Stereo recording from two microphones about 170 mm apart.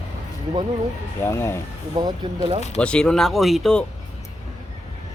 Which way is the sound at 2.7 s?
5° left (ahead or behind).